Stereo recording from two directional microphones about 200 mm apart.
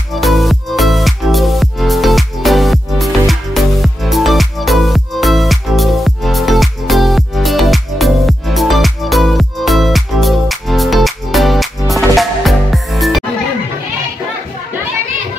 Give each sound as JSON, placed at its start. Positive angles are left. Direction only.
{"t": 0.1, "sound": "music", "side_deg": 0}